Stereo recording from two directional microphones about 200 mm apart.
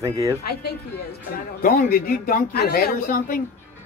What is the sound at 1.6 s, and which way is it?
Speech, 45° left (ahead or behind).